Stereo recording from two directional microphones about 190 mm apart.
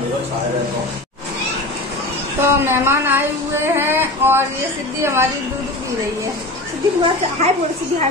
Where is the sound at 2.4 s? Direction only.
15° right (ahead or behind).